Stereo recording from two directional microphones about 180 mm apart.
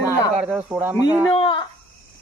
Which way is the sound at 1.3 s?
30° left (ahead or behind).